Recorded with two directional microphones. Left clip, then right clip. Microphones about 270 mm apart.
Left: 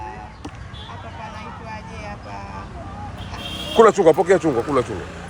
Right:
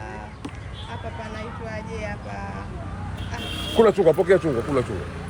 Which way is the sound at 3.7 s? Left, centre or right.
Left.